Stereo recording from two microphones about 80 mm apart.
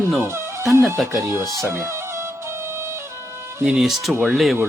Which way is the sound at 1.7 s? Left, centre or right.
Right.